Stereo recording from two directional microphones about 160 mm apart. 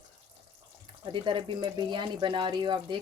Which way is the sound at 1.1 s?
30° right (ahead or behind).